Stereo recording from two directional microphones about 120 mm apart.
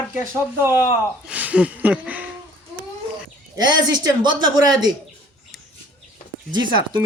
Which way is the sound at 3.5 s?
35° right (ahead or behind).